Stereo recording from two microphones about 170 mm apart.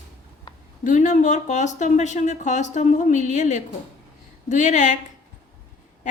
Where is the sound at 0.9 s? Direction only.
45° left (ahead or behind).